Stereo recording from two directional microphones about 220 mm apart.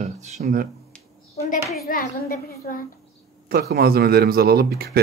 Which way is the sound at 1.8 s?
40° left (ahead or behind).